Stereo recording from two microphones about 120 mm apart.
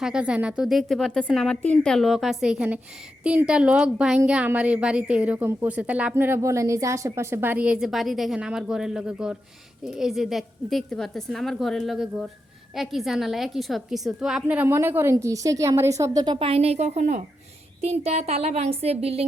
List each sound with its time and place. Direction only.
0.0 s a woman's voice: 10° right (ahead or behind); by 16.5 s 40° right (ahead or behind)
16.5 s speech: 60° right (ahead or behind); by 17.2 s 80° right
17.7 s speech: 60° right (ahead or behind)